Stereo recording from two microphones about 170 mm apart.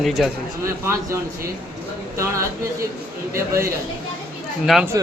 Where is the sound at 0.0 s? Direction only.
Centre (ahead or behind).